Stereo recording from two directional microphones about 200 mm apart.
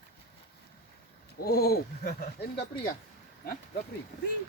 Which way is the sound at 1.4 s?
50° left (ahead or behind).